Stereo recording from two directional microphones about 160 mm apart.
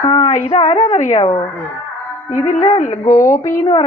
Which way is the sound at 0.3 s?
40° left (ahead or behind).